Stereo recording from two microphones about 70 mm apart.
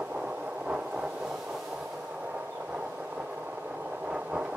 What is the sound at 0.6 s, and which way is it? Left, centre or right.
Vehicle, centre.